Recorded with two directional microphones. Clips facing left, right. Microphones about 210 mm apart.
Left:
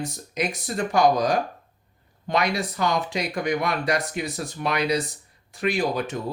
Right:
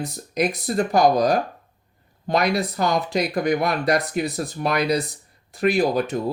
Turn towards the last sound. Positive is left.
turn(degrees=-40)  # may be behind; listen again after turning